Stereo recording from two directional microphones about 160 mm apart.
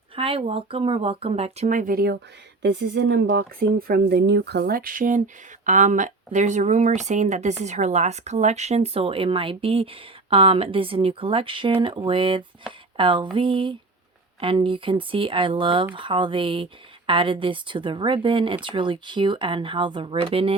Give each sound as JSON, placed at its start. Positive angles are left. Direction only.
{"t": 0.2, "sound": "speech", "side_deg": -35}
{"t": 2.6, "sound": "speech", "side_deg": -90}